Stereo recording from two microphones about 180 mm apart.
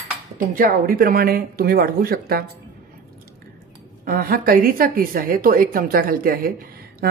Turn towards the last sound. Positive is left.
turn(degrees=-55)  # may be behind; listen again after turning